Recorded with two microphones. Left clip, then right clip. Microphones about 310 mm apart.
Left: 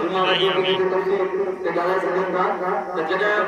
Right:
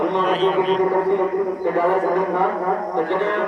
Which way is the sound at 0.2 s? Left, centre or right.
Centre.